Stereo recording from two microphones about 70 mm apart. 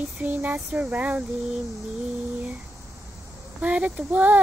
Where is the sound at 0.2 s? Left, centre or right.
Right.